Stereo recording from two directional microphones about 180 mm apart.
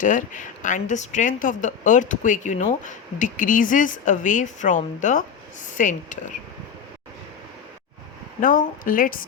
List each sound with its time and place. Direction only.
0.0 s a woman's voice: 45° left (ahead or behind)
8.4 s a woman's voice: 45° left (ahead or behind)